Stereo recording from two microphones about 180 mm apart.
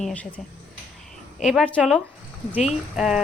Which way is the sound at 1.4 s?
Centre (ahead or behind).